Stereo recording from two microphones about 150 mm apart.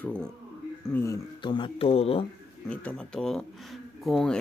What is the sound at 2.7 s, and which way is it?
Speech, 10° left (ahead or behind).